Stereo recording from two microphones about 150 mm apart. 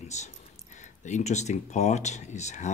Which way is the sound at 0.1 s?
50° left (ahead or behind).